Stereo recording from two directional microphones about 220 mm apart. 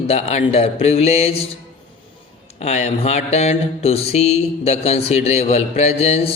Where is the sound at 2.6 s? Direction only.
30° left (ahead or behind).